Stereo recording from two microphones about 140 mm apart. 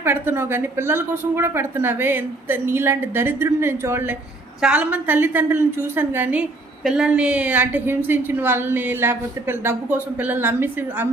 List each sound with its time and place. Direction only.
0.0 s a woman's voice: 15° right (ahead or behind)